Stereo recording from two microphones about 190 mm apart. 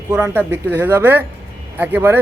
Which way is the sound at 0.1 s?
10° right (ahead or behind).